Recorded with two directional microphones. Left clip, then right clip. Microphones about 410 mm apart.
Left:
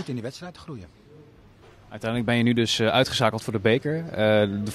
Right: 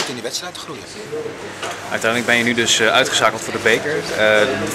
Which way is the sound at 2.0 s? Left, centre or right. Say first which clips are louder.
Right 8 dB; left.